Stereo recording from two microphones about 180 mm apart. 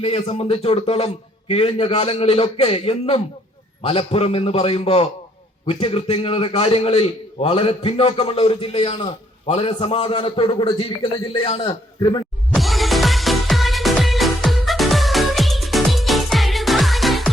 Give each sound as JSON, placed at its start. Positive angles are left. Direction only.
{"t": 0.0, "sound": "a man's voice", "side_deg": 35}
{"t": 12.5, "sound": "music", "side_deg": 0}